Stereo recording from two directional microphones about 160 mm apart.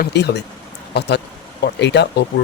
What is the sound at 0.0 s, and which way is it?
Speech, 90° left.